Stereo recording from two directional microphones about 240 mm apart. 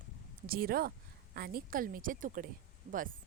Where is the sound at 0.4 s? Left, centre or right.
Right.